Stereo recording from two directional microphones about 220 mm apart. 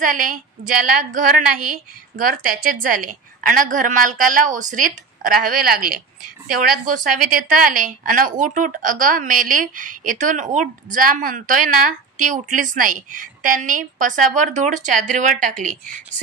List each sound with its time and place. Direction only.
0.0 s a woman's voice: 40° right (ahead or behind)